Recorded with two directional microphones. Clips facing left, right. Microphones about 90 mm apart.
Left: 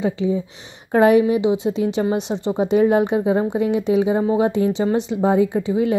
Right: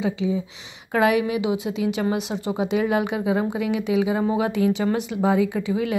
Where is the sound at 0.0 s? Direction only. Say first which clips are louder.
Left 3 dB; 45° left (ahead or behind).